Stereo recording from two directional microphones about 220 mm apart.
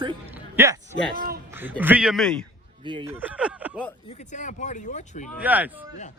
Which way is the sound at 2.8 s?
20° right (ahead or behind).